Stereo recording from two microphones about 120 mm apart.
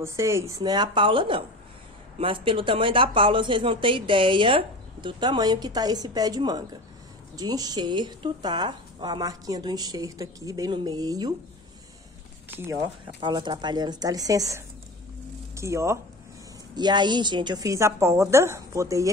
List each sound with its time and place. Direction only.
0.0 s speech: 25° right (ahead or behind)
12.4 s speech: 20° right (ahead or behind)
12.7 s speech: 40° right (ahead or behind); by 16.0 s 25° right (ahead or behind)
16.7 s a woman's voice: 35° right (ahead or behind)